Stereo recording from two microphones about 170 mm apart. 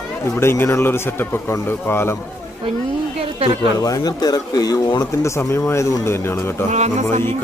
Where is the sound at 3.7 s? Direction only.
20° left (ahead or behind).